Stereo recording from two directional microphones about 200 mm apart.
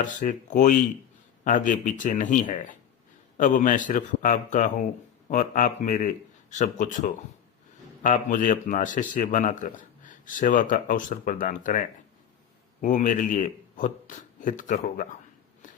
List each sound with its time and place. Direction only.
0.0 s speech: 40° left (ahead or behind)
8.0 s speech: 40° left (ahead or behind)
12.8 s speech: 40° left (ahead or behind)
15.6 s walk: 40° left (ahead or behind)